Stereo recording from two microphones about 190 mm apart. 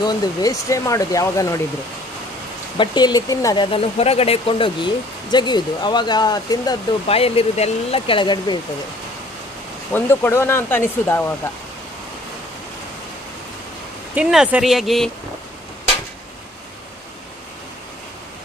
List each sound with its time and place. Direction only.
0.0 s speech: 20° left (ahead or behind)
2.8 s speech: 25° left (ahead or behind)
3.7 s speech: 30° left (ahead or behind)
9.9 s speech: 10° left (ahead or behind)
14.1 s speech: 5° right (ahead or behind)